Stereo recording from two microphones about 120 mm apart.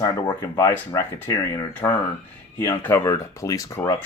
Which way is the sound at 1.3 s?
30° left (ahead or behind).